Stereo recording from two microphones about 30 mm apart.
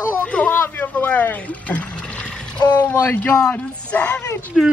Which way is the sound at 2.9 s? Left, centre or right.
Left.